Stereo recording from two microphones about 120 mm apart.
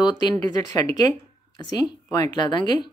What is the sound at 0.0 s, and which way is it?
Speech, 35° left (ahead or behind).